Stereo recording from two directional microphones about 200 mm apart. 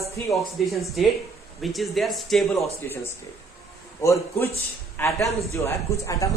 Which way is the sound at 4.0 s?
15° left (ahead or behind).